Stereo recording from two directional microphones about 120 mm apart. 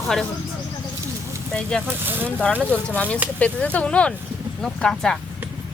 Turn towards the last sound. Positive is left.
turn(degrees=5)  # may be behind; listen again after turning